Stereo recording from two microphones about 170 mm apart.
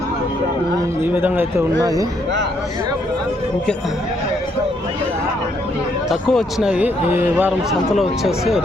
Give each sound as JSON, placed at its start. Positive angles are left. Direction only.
{"t": 1.1, "sound": "speech", "side_deg": -10}
{"t": 6.1, "sound": "speech", "side_deg": 0}
{"t": 7.7, "sound": "speech", "side_deg": 0}